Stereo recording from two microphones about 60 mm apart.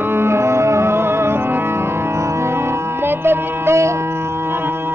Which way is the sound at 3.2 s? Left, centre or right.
Right.